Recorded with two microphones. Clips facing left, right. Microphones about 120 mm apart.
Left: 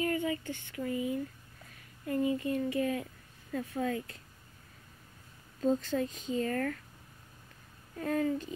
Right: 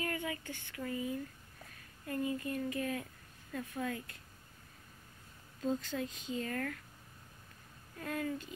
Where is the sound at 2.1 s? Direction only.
25° left (ahead or behind).